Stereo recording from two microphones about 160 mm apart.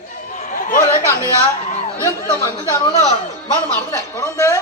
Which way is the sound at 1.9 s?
20° left (ahead or behind).